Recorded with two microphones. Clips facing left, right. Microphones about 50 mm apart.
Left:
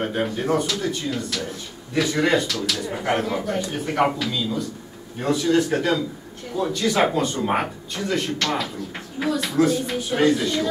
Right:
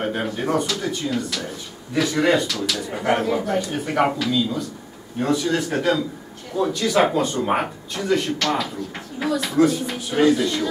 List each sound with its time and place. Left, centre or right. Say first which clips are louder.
0.0 s speech: even; centre